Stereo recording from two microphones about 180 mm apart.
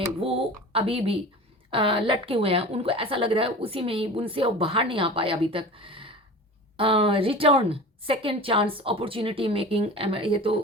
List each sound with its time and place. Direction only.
0.2 s a woman's voice: 30° right (ahead or behind)